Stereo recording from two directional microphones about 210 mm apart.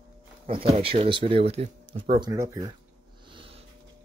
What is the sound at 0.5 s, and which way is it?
Speech, 25° right (ahead or behind).